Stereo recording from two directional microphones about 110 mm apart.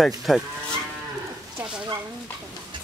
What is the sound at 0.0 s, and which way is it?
Cattle, centre (ahead or behind).